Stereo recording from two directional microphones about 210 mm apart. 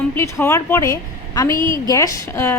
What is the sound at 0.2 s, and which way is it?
A woman's voice, 15° left (ahead or behind).